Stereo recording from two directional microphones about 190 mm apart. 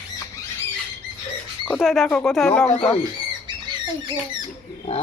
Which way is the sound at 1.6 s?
Centre (ahead or behind).